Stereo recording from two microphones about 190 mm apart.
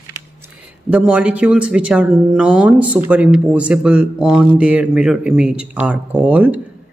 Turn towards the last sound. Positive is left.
turn(degrees=-5)  # may be behind; listen again after turning